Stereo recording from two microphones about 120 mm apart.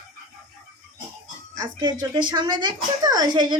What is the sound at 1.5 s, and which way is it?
A woman's voice, 35° right (ahead or behind).